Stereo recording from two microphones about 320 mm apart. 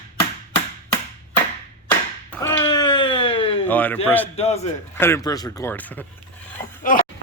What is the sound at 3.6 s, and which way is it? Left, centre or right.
Speech, centre.